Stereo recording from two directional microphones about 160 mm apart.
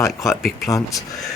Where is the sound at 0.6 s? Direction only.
20° left (ahead or behind).